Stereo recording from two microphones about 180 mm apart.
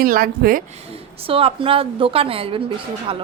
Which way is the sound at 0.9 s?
30° right (ahead or behind).